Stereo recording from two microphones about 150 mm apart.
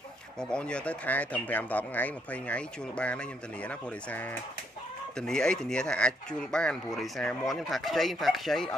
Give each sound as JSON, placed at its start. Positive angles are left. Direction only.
{"t": 0.4, "sound": "speech", "side_deg": 5}